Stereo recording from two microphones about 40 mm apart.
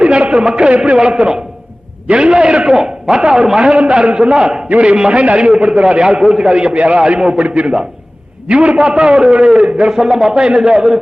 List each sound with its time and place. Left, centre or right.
0.0 s a man's voice: right
2.6 s a man's voice: centre; by 4.1 s right
4.1 s a man's voice: right
4.7 s a man's voice: right
5.9 s a man's voice: right
7.4 s a man's voice: right; by 10.3 s centre
10.3 s a man's voice: right